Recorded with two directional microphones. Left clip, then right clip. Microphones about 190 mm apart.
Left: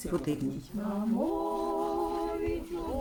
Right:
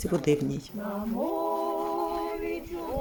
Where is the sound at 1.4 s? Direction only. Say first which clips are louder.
Right 3 dB; 10° right (ahead or behind).